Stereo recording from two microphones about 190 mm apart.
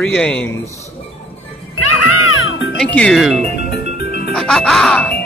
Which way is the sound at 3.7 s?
55° left (ahead or behind).